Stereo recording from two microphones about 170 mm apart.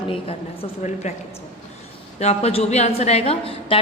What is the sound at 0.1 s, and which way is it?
A woman's voice, 35° left (ahead or behind).